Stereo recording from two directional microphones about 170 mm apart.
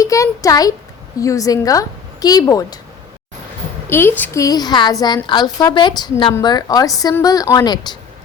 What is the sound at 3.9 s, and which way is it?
A woman's voice, 15° left (ahead or behind).